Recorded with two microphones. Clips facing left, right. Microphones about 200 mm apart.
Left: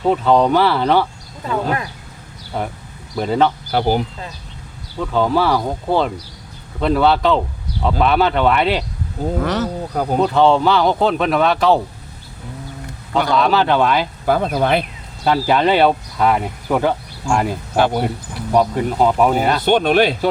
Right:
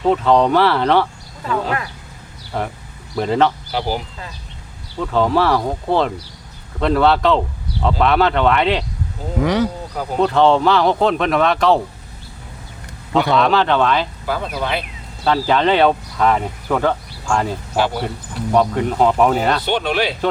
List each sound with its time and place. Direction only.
0.0 s speech: 5° left (ahead or behind)
1.5 s speech: 25° left (ahead or behind)
2.5 s speech: 5° left (ahead or behind)
3.7 s speech: 50° left (ahead or behind)
4.9 s speech: centre (ahead or behind)
9.4 s speech: 15° right (ahead or behind)
9.9 s speech: 50° left (ahead or behind)
10.2 s speech: 5° left (ahead or behind)
13.3 s speech: 5° left (ahead or behind)
14.3 s speech: 50° left (ahead or behind)
15.2 s speech: 10° left (ahead or behind)
17.7 s speech: 55° left (ahead or behind)
18.5 s speech: 5° left (ahead or behind)
19.6 s speech: 50° left (ahead or behind)